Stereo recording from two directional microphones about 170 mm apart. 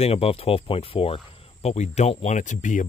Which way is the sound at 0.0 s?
35° left (ahead or behind).